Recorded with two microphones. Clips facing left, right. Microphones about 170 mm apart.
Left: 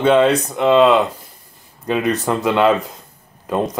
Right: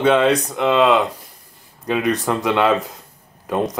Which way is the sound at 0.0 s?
Centre (ahead or behind).